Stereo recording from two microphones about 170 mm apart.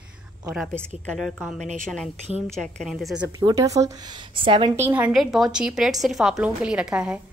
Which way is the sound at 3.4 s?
20° right (ahead or behind).